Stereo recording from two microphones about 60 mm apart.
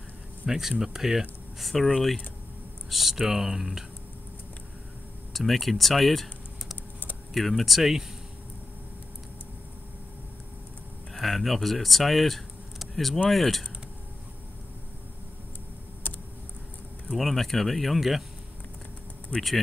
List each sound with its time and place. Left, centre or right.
0.5 s speech: centre
1.6 s speech: centre
2.9 s speech: centre
5.3 s speech: centre
7.3 s speech: centre
11.1 s speech: centre
16.0 s computer keyboard: left
17.2 s speech: centre
19.3 s speech: centre